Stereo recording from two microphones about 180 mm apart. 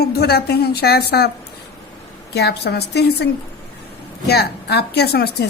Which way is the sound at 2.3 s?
65° left (ahead or behind).